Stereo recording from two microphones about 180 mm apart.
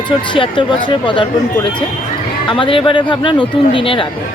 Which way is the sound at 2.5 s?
30° left (ahead or behind).